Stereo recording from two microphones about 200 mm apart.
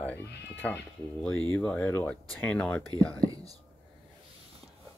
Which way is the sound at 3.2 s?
20° right (ahead or behind).